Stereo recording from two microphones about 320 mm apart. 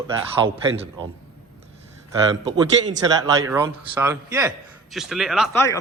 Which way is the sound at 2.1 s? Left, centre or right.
Centre.